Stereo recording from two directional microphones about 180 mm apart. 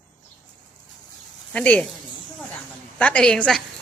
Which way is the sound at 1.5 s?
5° left (ahead or behind).